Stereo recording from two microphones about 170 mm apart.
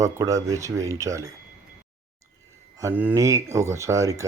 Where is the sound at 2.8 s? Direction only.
15° right (ahead or behind).